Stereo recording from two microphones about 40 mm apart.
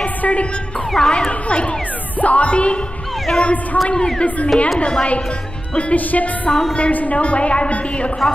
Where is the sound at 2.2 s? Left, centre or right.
Left.